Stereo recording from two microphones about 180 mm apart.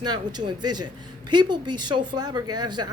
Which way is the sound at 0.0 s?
25° right (ahead or behind).